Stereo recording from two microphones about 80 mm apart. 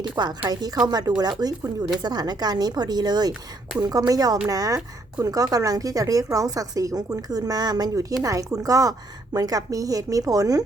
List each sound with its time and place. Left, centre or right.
0.2 s speech: right
8.2 s speech: right